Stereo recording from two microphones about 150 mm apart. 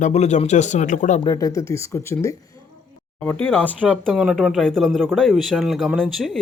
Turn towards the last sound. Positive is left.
turn(degrees=0)  # may be behind; listen again after turning